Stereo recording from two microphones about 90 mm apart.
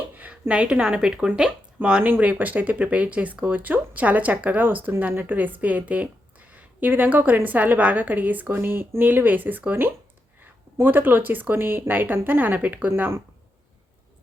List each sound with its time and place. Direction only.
0.1 s a woman's voice: 15° right (ahead or behind)